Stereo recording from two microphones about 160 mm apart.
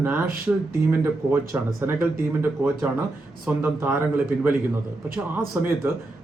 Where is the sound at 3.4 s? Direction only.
10° right (ahead or behind).